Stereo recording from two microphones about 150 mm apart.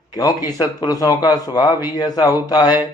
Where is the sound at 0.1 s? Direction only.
25° left (ahead or behind).